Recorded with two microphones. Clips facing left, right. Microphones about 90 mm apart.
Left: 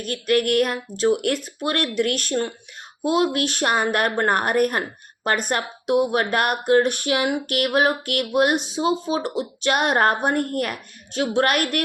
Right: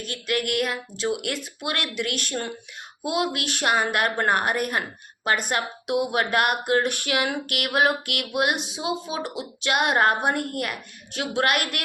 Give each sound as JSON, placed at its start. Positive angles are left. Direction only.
{"t": 0.0, "sound": "a woman's voice", "side_deg": 45}